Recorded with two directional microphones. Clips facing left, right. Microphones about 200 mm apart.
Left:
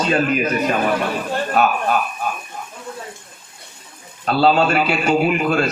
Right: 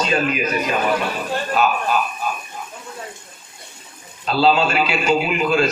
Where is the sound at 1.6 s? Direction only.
60° left (ahead or behind).